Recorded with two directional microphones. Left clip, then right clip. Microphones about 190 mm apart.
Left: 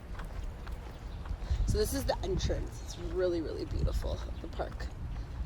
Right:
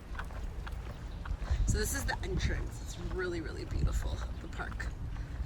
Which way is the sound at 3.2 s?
15° left (ahead or behind).